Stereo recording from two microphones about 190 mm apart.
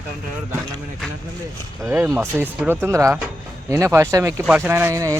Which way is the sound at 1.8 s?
10° right (ahead or behind).